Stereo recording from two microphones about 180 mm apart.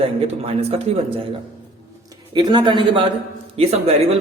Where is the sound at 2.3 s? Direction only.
25° right (ahead or behind).